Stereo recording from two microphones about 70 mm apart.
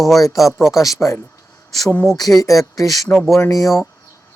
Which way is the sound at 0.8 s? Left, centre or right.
Left.